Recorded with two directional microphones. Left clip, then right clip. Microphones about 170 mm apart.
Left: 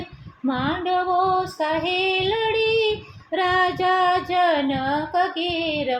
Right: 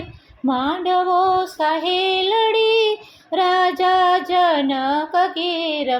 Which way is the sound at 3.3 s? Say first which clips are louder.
Right 3 dB; 25° right (ahead or behind).